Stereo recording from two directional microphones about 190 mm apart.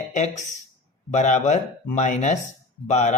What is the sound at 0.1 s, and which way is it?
Speech, 40° left (ahead or behind).